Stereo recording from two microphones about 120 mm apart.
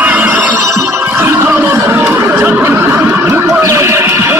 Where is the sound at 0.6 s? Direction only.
25° right (ahead or behind).